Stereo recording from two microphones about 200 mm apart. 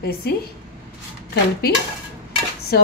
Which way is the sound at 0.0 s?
50° left (ahead or behind).